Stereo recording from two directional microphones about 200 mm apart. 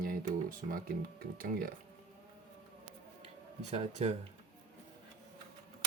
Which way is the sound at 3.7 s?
35° right (ahead or behind).